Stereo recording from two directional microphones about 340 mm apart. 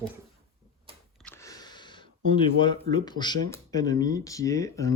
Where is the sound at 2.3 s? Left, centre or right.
Centre.